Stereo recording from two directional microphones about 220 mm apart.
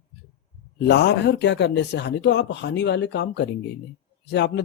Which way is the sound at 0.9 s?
50° left (ahead or behind).